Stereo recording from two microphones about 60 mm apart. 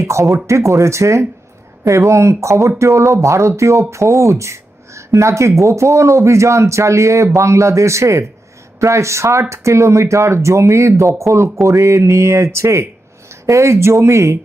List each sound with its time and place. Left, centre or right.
0.0 s speech: right